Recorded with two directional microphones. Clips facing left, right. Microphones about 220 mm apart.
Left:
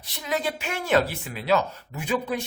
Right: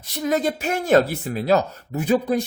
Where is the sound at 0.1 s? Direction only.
45° right (ahead or behind).